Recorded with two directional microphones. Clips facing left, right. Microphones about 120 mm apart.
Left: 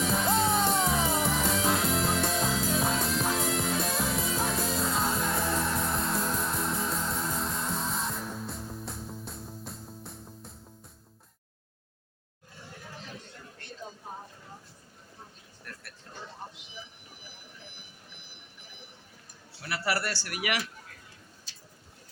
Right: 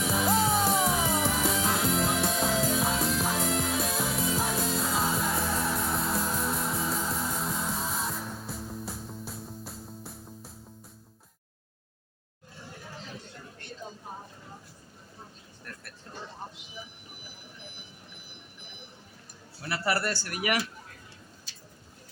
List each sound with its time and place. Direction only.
0.0 s music: 5° right (ahead or behind)
19.6 s a sound: 30° right (ahead or behind)
20.1 s speech: 40° right (ahead or behind)